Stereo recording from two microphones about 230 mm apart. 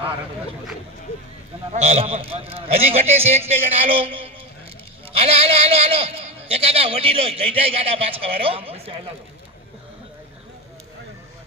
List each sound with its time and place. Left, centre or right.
1.7 s a man's voice: right